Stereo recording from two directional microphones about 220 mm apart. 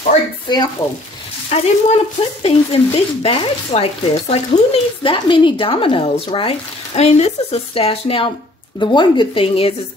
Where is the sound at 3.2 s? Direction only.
25° left (ahead or behind).